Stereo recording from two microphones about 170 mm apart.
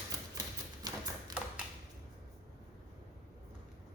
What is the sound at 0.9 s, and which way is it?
Tap, 25° right (ahead or behind).